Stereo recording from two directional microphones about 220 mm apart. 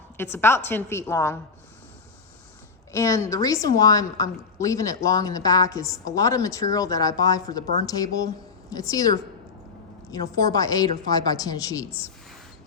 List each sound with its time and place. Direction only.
0.2 s a woman's voice: 10° left (ahead or behind)
2.9 s a woman's voice: 15° left (ahead or behind)